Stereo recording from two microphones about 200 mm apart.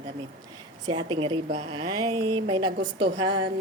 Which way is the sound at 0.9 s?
25° right (ahead or behind).